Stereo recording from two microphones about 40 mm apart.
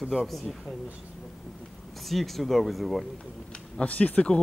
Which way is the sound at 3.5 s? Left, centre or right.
Left.